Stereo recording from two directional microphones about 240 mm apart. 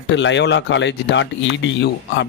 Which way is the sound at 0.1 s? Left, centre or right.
Left.